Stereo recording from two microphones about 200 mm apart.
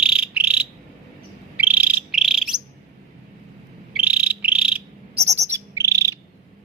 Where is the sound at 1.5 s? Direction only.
10° right (ahead or behind).